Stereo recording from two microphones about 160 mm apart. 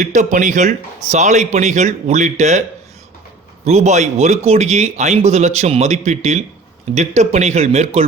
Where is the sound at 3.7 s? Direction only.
45° right (ahead or behind).